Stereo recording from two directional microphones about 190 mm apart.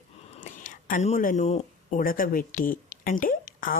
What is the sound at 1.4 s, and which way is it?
Speech, 35° left (ahead or behind).